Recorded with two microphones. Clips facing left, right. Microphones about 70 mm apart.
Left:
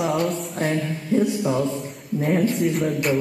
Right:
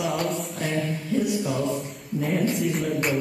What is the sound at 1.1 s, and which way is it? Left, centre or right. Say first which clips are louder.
Speech: left 6 dB; left.